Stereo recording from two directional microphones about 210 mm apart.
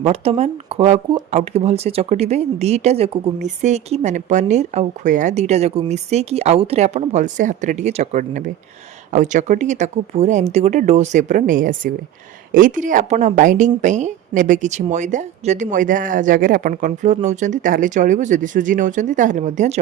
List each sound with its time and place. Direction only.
0.0 s a woman's voice: 30° right (ahead or behind)